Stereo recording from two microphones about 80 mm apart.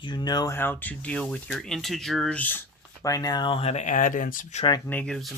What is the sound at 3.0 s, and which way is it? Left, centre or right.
Speech, left.